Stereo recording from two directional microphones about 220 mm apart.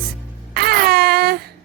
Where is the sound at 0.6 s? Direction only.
45° right (ahead or behind).